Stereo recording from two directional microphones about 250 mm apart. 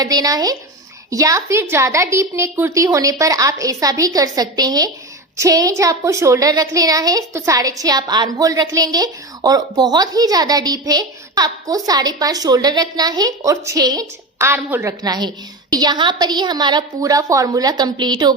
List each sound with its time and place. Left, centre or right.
0.0 s a woman's voice: centre